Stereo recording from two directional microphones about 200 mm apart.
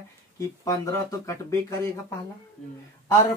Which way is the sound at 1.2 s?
15° left (ahead or behind).